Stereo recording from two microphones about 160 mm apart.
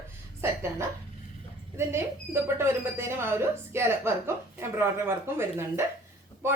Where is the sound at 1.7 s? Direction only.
15° right (ahead or behind).